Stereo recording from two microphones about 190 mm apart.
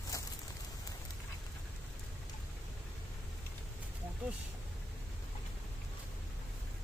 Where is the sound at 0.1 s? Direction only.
20° left (ahead or behind).